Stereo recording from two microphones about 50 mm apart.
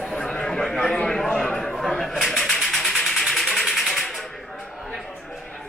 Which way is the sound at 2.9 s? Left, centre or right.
Centre.